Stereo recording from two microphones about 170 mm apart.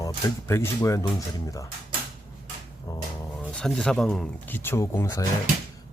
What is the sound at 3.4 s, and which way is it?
Speech, 5° left (ahead or behind).